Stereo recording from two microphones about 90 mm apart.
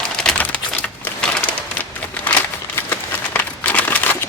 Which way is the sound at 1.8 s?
20° left (ahead or behind).